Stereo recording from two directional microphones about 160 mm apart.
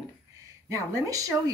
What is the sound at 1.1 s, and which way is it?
Speech, 20° right (ahead or behind).